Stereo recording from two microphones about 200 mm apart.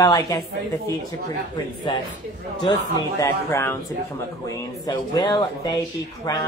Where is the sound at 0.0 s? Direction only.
20° left (ahead or behind).